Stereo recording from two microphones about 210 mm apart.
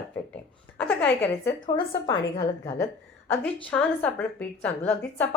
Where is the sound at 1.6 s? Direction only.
20° left (ahead or behind).